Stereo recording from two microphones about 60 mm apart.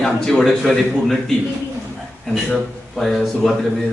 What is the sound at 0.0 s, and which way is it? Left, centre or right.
Speech, centre.